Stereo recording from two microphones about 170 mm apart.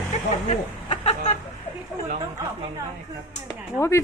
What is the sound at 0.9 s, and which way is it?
Speech, 40° left (ahead or behind).